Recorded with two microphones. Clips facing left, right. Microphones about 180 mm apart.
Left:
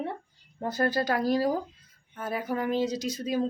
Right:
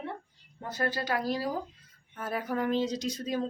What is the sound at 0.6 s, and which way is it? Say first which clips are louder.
Speech: left 5 dB; 40° left (ahead or behind).